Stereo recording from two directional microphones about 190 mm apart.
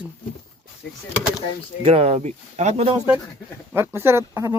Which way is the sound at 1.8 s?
35° right (ahead or behind).